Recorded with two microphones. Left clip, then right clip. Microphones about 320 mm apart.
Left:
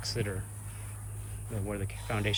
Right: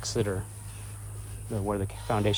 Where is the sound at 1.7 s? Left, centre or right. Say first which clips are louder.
Right 7 dB; right.